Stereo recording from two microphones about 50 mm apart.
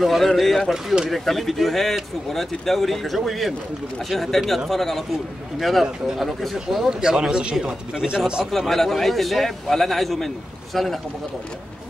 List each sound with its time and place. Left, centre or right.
0.0 s a man's voice: centre
6.9 s speech: centre
8.5 s a man's voice: centre